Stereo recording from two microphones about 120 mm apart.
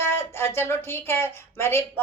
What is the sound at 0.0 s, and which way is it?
A woman's voice, 20° left (ahead or behind).